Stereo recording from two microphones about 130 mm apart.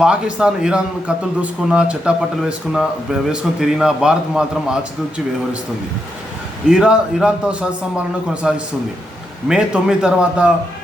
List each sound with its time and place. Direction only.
0.0 s a man's voice: 5° right (ahead or behind)
6.7 s a man's voice: 5° right (ahead or behind)